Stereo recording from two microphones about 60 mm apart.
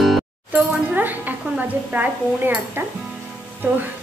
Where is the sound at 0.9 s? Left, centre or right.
Right.